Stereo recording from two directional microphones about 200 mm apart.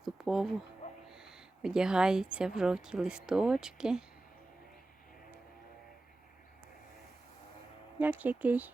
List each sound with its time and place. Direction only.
0.0 s a sound: centre (ahead or behind)
2.6 s speech: 5° right (ahead or behind)
7.9 s speech: 10° right (ahead or behind)